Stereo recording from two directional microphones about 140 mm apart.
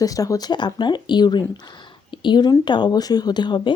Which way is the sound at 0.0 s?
25° left (ahead or behind).